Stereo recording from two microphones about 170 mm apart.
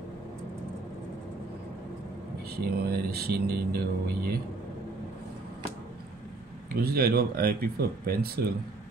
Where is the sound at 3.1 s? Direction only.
70° right (ahead or behind).